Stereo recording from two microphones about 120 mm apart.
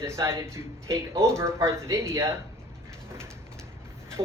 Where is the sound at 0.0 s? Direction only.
25° right (ahead or behind).